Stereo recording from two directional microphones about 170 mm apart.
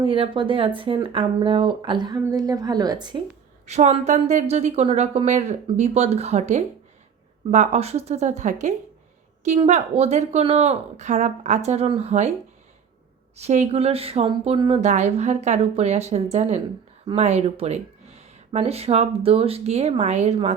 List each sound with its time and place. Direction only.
0.0 s a woman's voice: 30° right (ahead or behind)
3.7 s speech: 40° right (ahead or behind)
13.4 s speech: 40° right (ahead or behind)